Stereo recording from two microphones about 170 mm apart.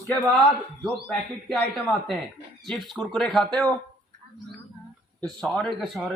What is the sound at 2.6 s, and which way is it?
Speech, centre (ahead or behind).